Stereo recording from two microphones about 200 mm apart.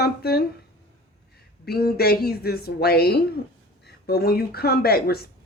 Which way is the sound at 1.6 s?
50° left (ahead or behind).